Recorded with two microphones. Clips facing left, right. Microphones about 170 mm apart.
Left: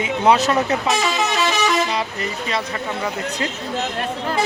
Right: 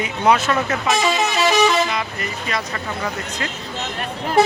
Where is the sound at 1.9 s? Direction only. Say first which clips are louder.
Left 2 dB; 30° left (ahead or behind).